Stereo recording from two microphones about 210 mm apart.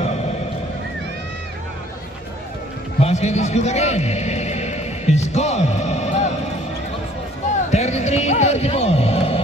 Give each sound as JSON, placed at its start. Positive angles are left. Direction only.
{"t": 3.0, "sound": "music", "side_deg": 30}
{"t": 7.7, "sound": "music", "side_deg": 30}